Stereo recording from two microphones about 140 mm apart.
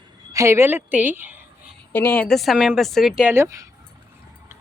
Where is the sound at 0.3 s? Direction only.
20° right (ahead or behind).